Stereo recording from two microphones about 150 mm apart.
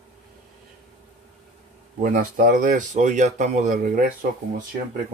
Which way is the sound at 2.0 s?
70° right (ahead or behind).